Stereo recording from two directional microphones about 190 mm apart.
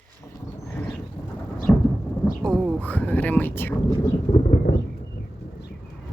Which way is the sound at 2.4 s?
5° left (ahead or behind).